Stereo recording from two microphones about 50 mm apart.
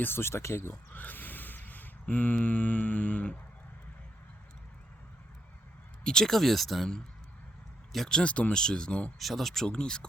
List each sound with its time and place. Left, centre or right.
0.0 s speech: left
0.9 s a sound: left
6.1 s speech: centre
7.9 s speech: centre
8.2 s speech: left
8.5 s speech: centre
9.1 s speech: centre
9.6 s speech: centre